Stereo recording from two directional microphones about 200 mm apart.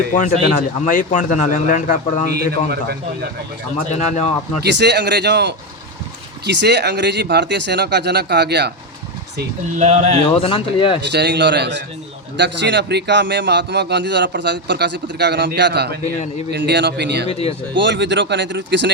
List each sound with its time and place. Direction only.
0.1 s speech: 40° left (ahead or behind)
2.3 s a man's voice: 55° right (ahead or behind)
3.9 s speech: 35° left (ahead or behind)
4.6 s a man's voice: 60° right (ahead or behind)
9.7 s speech: 35° right (ahead or behind)
10.3 s speech: 25° left (ahead or behind)
11.0 s a man's voice: 60° right (ahead or behind)
17.2 s speech: 30° left (ahead or behind)
17.7 s a man's voice: 65° right (ahead or behind)